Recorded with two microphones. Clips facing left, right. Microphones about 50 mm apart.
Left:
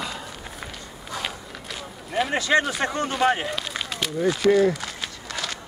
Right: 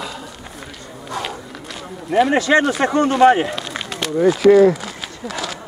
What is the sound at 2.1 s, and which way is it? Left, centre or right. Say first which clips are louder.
Speech: right 7 dB; centre.